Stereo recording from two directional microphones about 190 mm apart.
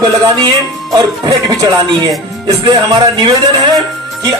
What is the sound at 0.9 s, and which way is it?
Speech, 20° right (ahead or behind).